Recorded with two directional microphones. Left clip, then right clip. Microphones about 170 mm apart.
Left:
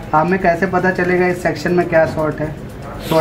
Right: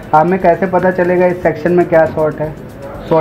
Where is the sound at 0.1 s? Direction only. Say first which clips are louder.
Right 4 dB; 25° right (ahead or behind).